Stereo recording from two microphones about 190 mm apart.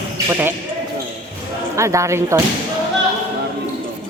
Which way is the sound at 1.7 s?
15° right (ahead or behind).